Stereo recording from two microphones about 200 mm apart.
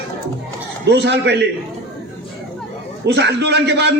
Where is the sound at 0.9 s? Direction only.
60° right (ahead or behind).